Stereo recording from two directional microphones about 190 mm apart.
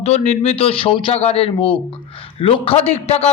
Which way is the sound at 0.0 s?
35° left (ahead or behind).